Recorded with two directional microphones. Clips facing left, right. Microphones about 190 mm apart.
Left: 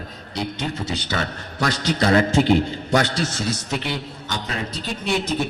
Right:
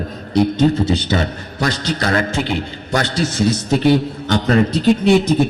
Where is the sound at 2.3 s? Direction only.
40° left (ahead or behind).